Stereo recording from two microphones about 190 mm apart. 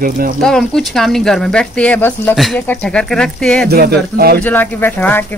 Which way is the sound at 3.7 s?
55° right (ahead or behind).